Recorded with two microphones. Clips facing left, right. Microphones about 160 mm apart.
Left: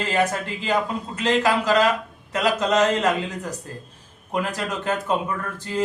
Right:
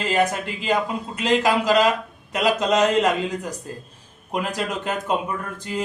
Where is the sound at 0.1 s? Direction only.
15° right (ahead or behind).